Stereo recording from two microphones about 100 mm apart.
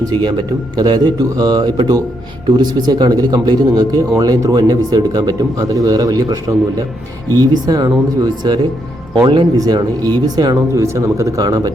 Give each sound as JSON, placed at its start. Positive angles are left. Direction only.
{"t": 0.0, "sound": "speech", "side_deg": -45}